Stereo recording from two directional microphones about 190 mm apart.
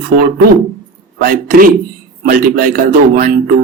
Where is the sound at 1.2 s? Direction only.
50° right (ahead or behind).